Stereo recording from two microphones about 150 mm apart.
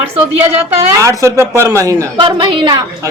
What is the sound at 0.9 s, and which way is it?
A woman's voice, 20° right (ahead or behind).